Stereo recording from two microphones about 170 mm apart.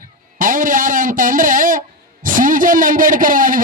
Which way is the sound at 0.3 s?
55° right (ahead or behind).